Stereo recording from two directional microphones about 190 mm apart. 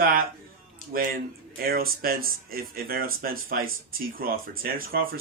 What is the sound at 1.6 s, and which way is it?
Speech, 50° right (ahead or behind).